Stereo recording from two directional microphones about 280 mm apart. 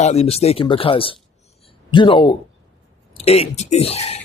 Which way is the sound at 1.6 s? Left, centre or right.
Centre.